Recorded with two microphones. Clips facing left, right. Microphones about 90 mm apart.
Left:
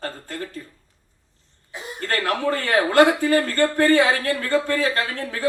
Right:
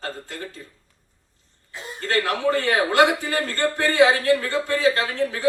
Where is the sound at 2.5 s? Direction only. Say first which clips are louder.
Left 1 dB; 20° right (ahead or behind).